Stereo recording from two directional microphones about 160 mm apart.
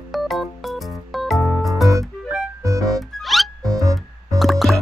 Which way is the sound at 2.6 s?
20° right (ahead or behind).